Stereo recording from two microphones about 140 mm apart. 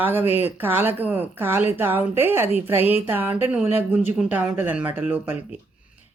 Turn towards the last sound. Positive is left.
turn(degrees=-10)  # may be behind; listen again after turning